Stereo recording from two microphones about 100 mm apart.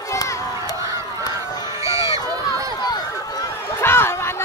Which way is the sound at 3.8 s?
25° left (ahead or behind).